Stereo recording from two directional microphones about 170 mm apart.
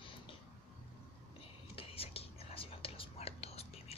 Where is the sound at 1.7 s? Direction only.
35° left (ahead or behind).